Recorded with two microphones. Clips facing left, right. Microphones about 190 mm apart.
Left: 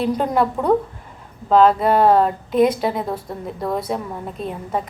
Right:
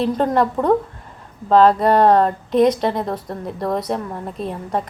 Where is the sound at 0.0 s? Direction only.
10° left (ahead or behind).